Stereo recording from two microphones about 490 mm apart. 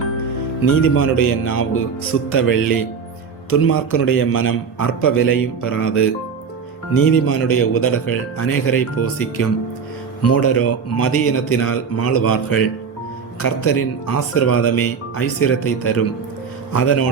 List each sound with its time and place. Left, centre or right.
0.9 s a man's voice: left